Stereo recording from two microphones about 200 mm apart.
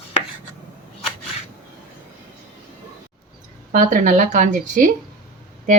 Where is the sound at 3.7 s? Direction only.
40° right (ahead or behind).